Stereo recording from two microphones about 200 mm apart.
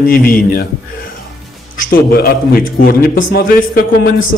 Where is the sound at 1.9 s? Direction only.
50° left (ahead or behind).